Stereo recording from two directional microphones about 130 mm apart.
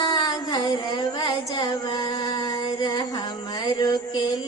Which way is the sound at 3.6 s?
35° left (ahead or behind).